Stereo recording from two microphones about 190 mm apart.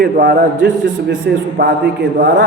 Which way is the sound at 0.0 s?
60° right (ahead or behind).